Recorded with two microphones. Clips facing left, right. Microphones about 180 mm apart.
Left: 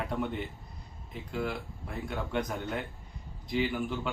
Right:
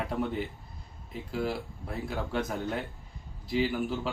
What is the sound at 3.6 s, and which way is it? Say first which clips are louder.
Speech: right 2 dB; 30° right (ahead or behind).